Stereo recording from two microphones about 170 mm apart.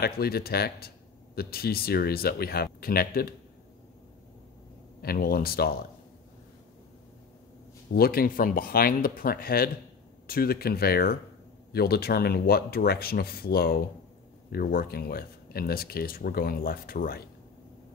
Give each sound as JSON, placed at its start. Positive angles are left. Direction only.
{"t": 0.0, "sound": "speech", "side_deg": 65}
{"t": 5.0, "sound": "speech", "side_deg": 60}
{"t": 7.9, "sound": "speech", "side_deg": 65}